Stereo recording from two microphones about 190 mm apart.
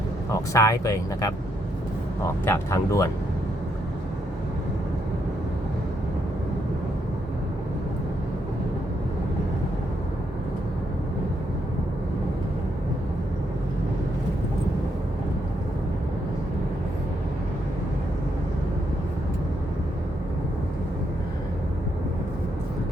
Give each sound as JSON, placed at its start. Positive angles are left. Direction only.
{"t": 0.3, "sound": "speech", "side_deg": 15}
{"t": 2.4, "sound": "speech", "side_deg": 15}